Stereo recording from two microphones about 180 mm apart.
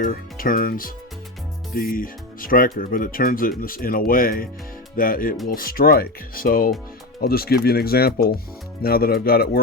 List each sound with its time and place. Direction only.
0.0 s speech: 50° left (ahead or behind)